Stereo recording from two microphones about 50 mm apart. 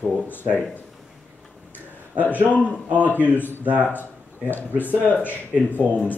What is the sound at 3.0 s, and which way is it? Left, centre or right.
Speech, left.